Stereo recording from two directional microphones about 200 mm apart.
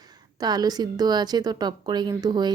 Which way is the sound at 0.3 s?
20° right (ahead or behind).